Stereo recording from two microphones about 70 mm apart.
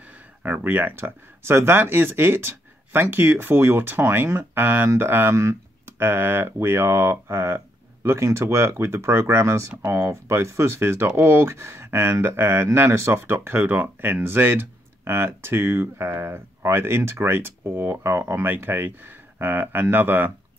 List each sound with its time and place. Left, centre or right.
0.0 s speech: right